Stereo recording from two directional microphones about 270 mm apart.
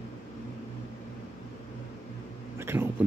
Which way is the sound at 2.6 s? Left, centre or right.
Centre.